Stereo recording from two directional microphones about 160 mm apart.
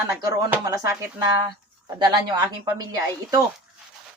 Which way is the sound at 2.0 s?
25° right (ahead or behind).